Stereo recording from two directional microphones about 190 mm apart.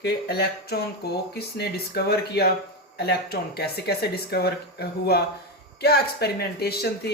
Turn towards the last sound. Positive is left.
turn(degrees=55)  # may be behind; listen again after turning